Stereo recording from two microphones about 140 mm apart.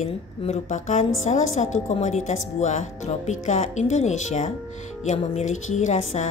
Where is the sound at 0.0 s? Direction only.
50° left (ahead or behind).